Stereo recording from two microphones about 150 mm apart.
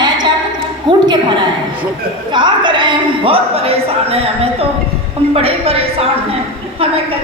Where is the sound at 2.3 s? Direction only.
30° right (ahead or behind).